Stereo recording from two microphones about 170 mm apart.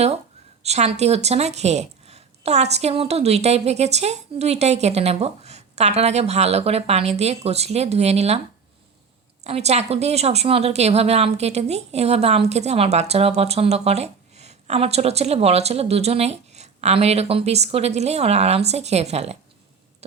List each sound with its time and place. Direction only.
0.6 s a woman's voice: 40° right (ahead or behind)
9.4 s a woman's voice: 40° right (ahead or behind)